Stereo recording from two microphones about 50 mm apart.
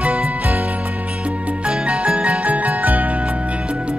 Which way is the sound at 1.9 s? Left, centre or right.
Right.